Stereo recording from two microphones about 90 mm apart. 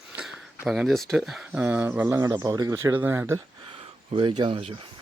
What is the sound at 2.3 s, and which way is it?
Speech, 45° right (ahead or behind).